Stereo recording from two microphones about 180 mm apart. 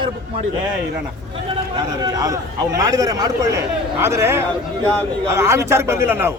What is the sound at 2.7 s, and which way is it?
A man's voice, 20° right (ahead or behind).